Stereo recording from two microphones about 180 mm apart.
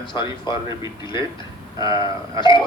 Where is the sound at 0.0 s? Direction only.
25° left (ahead or behind).